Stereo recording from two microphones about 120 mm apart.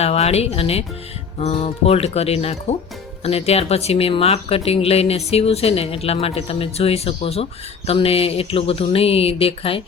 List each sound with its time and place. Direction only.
0.0 s speech: 60° left (ahead or behind)